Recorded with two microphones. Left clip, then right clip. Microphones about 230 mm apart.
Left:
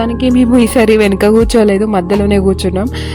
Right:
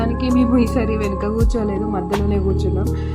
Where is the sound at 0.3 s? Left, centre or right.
Left.